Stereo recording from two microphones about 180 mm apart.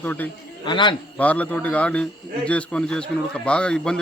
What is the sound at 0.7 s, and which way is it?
Speech, 25° left (ahead or behind).